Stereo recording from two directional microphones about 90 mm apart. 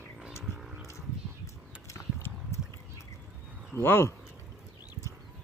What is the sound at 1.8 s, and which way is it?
Clip-clop, 30° left (ahead or behind).